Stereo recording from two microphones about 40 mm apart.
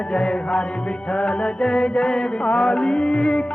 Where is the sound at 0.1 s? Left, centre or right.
Left.